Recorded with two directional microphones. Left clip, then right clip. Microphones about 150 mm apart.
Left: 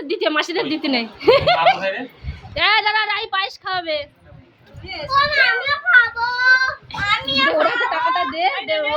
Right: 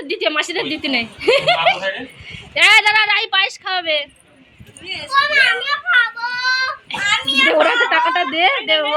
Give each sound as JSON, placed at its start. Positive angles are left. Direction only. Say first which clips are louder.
{"t": 0.1, "sound": "a woman's voice", "louder": "right 1 dB", "side_deg": 15}
{"t": 2.6, "sound": "a woman's voice", "louder": "right 5 dB", "side_deg": 0}
{"t": 5.1, "sound": "child singing", "louder": "right 2 dB", "side_deg": 60}
{"t": 7.0, "sound": "a sound", "louder": "right 3 dB", "side_deg": 75}
{"t": 7.4, "sound": "a woman's voice", "louder": "right 4 dB", "side_deg": -40}